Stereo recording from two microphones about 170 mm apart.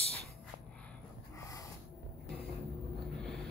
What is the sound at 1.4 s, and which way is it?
Snort, 20° left (ahead or behind).